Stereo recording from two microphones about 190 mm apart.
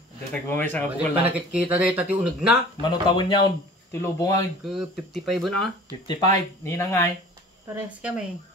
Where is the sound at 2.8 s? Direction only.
20° left (ahead or behind).